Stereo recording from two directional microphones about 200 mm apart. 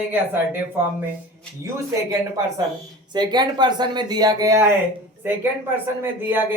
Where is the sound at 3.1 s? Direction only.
20° right (ahead or behind).